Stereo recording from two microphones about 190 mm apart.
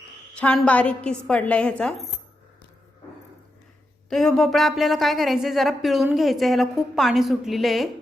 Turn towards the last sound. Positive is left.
turn(degrees=0)  # may be behind; listen again after turning